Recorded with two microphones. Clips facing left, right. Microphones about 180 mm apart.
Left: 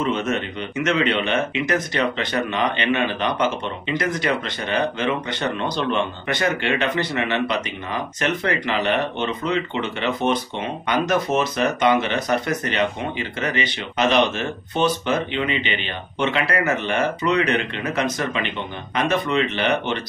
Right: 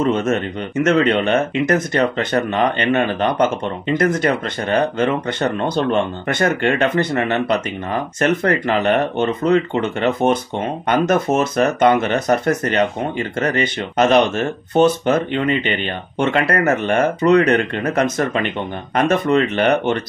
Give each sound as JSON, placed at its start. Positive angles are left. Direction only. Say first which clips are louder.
{"t": 0.0, "sound": "speech", "louder": "right 5 dB", "side_deg": -45}